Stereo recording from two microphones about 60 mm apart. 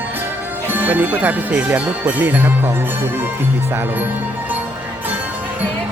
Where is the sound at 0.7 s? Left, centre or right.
Right.